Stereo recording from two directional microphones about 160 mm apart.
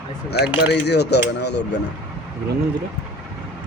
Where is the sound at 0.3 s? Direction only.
90° left.